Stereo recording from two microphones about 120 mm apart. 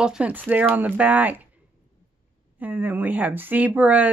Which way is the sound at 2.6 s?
15° right (ahead or behind).